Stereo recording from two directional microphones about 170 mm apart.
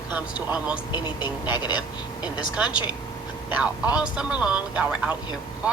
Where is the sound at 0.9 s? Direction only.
25° left (ahead or behind).